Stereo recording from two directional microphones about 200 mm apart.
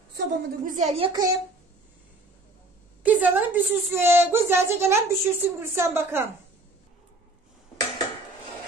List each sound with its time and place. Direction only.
0.1 s a woman's voice: 55° right (ahead or behind)
0.7 s a woman's voice: 30° right (ahead or behind)
3.0 s a woman's voice: 10° right (ahead or behind)